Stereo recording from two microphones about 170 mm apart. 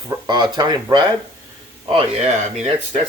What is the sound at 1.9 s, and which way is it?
Speech, 40° right (ahead or behind).